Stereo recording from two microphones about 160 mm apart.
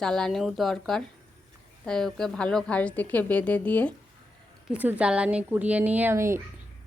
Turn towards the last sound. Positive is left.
turn(degrees=-15)  # may be behind; listen again after turning